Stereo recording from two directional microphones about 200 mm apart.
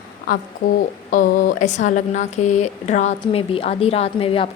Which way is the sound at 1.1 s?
45° left (ahead or behind).